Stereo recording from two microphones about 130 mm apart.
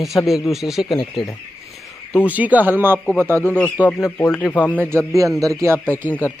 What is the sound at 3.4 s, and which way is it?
Speech, 10° left (ahead or behind).